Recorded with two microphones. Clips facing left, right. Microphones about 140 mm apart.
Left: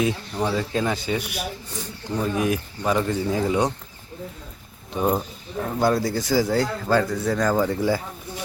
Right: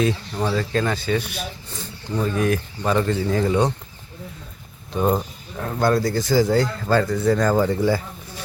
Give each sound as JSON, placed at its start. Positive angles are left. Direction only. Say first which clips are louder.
{"t": 0.4, "sound": "speech", "louder": "right 1 dB", "side_deg": 15}
{"t": 4.9, "sound": "speech", "louder": "right 2 dB", "side_deg": 5}